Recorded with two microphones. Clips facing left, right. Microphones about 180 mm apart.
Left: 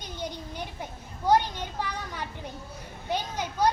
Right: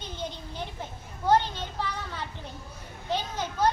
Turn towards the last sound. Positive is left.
turn(degrees=10)  # may be behind; listen again after turning